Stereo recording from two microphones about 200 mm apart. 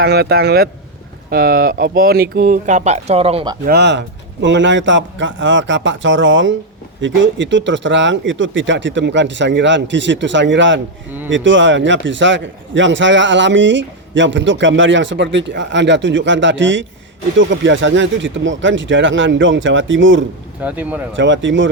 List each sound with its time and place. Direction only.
0.0 s speech: 55° right (ahead or behind); by 3.6 s 25° right (ahead or behind)
3.7 s a man's voice: 60° right (ahead or behind)
20.6 s speech: 5° right (ahead or behind)
21.2 s speech: 65° right (ahead or behind)